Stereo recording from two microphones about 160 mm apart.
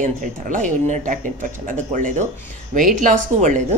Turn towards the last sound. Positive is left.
turn(degrees=-55)  # may be behind; listen again after turning